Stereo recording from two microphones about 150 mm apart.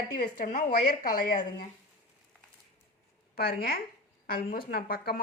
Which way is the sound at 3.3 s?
85° left.